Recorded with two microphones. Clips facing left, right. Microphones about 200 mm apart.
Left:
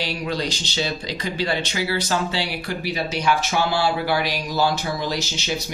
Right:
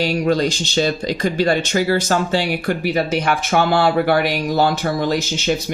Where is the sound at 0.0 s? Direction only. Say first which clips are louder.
Right 8 dB; 45° right (ahead or behind).